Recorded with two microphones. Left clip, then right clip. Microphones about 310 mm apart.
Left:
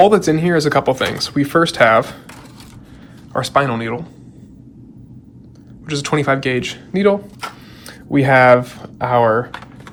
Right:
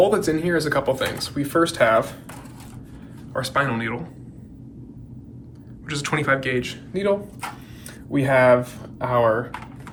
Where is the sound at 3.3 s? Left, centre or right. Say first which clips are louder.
Left 6 dB; centre.